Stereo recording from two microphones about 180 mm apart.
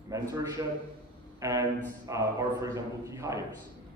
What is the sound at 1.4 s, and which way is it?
A man's voice, 20° right (ahead or behind).